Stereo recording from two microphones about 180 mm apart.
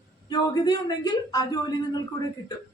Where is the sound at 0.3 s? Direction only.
25° left (ahead or behind).